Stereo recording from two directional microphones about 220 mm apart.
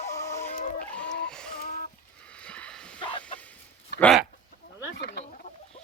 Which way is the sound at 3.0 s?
20° left (ahead or behind).